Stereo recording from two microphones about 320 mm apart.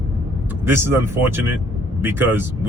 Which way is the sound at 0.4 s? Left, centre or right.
Centre.